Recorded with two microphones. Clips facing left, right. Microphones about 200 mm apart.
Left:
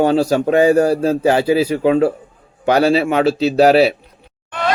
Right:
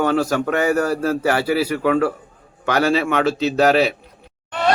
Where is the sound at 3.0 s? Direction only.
35° left (ahead or behind).